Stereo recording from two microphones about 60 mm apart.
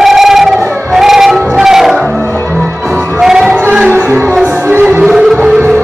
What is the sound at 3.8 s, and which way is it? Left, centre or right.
Music, right.